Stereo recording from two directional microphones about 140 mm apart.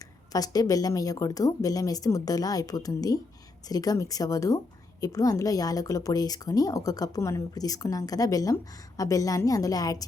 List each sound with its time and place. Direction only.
0.3 s a woman's voice: 25° left (ahead or behind)